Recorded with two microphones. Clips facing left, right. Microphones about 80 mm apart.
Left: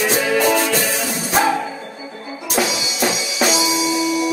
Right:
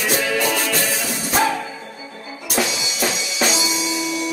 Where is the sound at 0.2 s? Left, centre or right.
Centre.